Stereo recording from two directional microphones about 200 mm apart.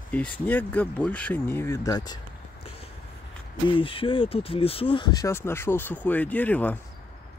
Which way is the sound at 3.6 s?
25° left (ahead or behind).